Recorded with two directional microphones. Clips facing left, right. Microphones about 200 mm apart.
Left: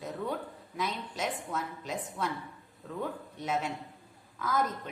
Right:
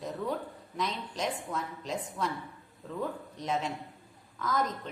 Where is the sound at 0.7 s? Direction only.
5° left (ahead or behind).